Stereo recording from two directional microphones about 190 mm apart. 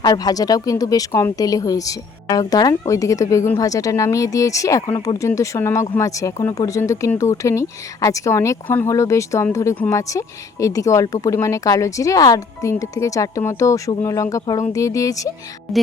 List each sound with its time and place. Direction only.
0.0 s speech: 20° left (ahead or behind)
15.7 s speech: centre (ahead or behind)